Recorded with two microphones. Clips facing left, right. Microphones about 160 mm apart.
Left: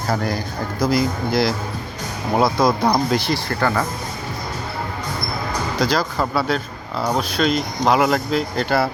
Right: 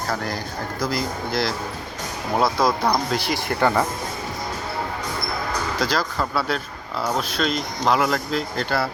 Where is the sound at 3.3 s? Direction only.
20° right (ahead or behind).